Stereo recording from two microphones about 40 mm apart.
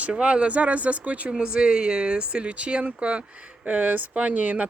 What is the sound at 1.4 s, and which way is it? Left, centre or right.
Speech, right.